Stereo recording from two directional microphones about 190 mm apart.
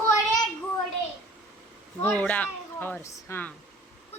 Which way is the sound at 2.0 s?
5° left (ahead or behind).